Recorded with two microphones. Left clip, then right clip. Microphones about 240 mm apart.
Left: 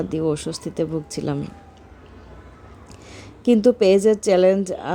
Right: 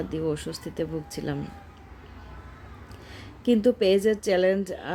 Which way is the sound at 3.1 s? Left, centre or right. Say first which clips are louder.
Left 6 dB; centre.